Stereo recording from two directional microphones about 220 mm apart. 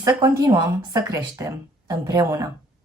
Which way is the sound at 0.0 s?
15° right (ahead or behind).